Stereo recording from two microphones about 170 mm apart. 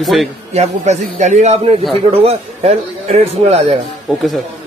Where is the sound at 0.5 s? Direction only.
40° right (ahead or behind).